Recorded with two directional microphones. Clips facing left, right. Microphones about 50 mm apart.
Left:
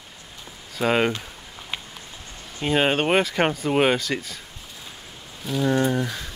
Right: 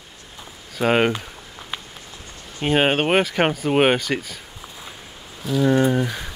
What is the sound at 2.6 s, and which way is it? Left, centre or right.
Speech, centre.